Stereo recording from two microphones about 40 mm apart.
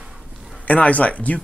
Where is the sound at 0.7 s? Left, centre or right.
Left.